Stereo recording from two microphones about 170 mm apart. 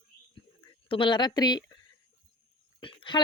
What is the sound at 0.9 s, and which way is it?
Speech, 30° left (ahead or behind).